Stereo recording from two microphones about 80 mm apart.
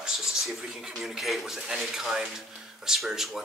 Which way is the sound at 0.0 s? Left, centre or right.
Centre.